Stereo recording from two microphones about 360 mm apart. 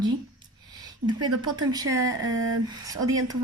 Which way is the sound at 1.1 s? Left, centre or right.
Centre.